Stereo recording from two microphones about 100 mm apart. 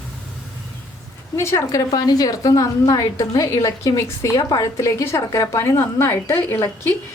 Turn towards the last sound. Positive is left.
turn(degrees=30)  # may be behind; listen again after turning